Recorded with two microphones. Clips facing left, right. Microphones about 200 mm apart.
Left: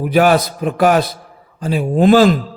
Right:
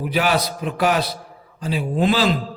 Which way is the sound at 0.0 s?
50° left (ahead or behind).